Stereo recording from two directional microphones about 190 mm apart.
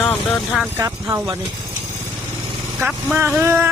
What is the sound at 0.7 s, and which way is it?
Speech, 15° right (ahead or behind).